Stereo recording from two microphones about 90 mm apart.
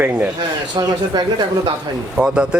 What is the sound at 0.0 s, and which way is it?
Speech, 15° right (ahead or behind).